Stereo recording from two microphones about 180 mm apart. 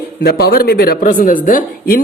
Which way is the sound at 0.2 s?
60° left (ahead or behind).